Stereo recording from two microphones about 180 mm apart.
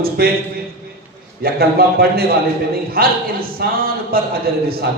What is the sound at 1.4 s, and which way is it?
A man's voice, 60° right (ahead or behind).